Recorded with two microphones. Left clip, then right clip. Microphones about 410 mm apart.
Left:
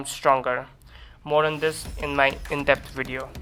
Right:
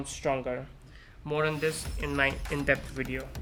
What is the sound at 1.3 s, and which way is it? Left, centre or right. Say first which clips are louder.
Speech: left 7 dB; centre.